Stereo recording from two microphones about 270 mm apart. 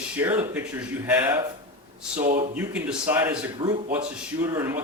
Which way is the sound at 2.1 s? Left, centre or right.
Right.